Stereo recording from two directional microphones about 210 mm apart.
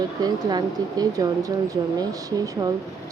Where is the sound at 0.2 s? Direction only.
20° right (ahead or behind).